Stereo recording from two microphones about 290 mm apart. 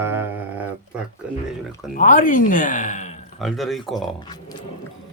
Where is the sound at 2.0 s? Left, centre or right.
Left.